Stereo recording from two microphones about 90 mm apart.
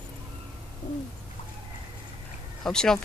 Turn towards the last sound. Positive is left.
turn(degrees=5)  # may be behind; listen again after turning